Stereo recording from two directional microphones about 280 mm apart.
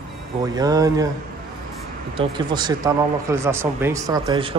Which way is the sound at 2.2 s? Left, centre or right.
Centre.